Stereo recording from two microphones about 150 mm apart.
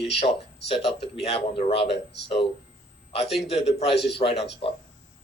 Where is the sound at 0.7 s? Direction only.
40° left (ahead or behind).